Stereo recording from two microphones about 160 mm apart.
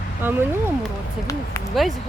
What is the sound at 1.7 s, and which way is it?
Speech, centre (ahead or behind).